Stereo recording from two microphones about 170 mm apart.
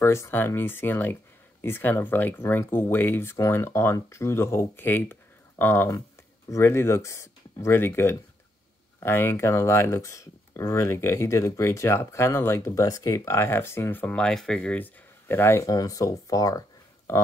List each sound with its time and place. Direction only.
0.0 s speech: 15° left (ahead or behind)